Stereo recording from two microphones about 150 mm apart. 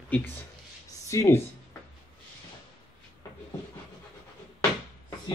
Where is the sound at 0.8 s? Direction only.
20° left (ahead or behind).